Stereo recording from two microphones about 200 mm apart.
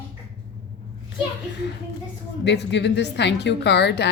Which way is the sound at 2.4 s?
60° left (ahead or behind).